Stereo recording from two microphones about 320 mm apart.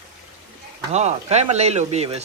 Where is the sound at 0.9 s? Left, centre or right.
Centre.